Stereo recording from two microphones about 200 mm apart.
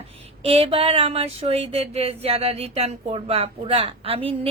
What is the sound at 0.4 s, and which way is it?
A woman's voice, 30° right (ahead or behind).